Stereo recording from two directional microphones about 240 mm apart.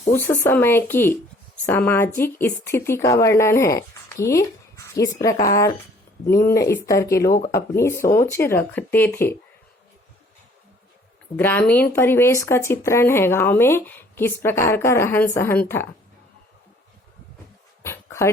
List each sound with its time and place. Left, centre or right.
0.1 s speech: centre
7.3 s speech: left
7.5 s speech: centre
11.3 s speech: centre
17.8 s dog: centre